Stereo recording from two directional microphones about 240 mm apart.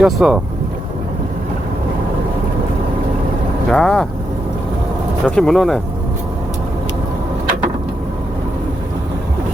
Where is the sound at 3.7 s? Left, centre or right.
Centre.